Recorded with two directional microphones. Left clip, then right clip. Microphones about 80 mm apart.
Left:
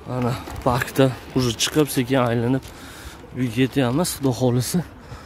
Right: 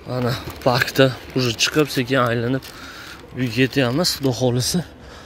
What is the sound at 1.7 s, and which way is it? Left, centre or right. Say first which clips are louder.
Speech: right 1 dB; left.